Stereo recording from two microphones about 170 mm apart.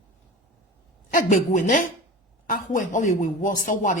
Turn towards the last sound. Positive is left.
turn(degrees=50)  # may be behind; listen again after turning